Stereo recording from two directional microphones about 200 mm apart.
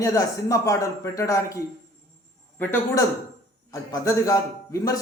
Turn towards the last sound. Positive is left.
turn(degrees=15)  # may be behind; listen again after turning